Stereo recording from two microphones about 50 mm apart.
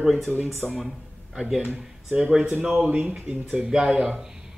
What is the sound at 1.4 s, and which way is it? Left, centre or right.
Speech, centre.